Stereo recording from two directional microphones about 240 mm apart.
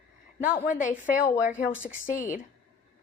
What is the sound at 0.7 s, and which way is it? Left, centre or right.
A woman's voice, left.